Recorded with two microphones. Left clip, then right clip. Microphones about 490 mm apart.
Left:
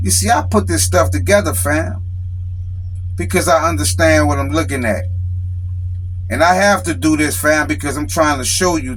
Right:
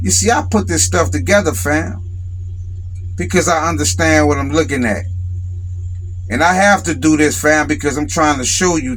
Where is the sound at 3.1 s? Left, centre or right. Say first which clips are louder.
Left 1 dB; left.